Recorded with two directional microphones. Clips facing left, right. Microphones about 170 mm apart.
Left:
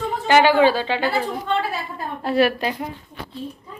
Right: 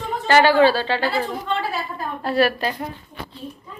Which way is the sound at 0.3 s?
15° left (ahead or behind).